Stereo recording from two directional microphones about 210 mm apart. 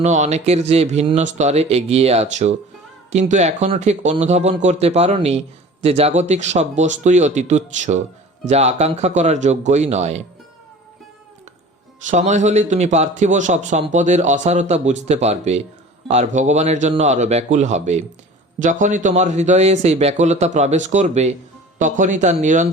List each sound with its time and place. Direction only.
0.0 s a man's voice: 35° right (ahead or behind)
12.0 s a man's voice: 35° right (ahead or behind)